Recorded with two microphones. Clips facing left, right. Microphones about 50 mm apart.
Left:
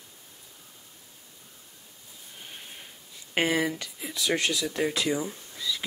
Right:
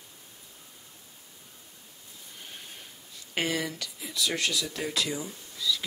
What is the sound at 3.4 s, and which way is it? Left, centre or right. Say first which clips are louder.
Speech: left 4 dB; left.